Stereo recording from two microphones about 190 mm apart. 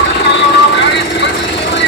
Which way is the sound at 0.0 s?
65° left (ahead or behind).